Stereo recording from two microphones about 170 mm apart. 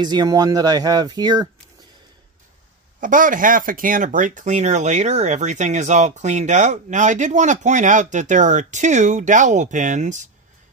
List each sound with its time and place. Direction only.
0.0 s speech: 25° right (ahead or behind)
3.0 s speech: 50° right (ahead or behind)